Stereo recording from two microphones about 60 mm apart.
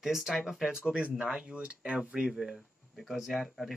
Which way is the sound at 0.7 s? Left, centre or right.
Centre.